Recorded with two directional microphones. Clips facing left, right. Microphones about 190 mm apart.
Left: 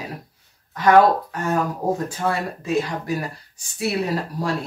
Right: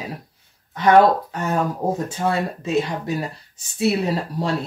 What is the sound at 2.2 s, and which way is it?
Speech, 25° right (ahead or behind).